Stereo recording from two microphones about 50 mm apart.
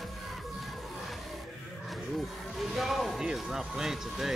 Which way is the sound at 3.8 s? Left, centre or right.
Centre.